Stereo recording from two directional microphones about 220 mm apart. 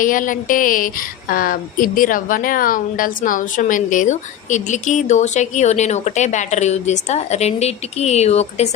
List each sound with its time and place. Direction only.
0.0 s a woman's voice: 35° left (ahead or behind)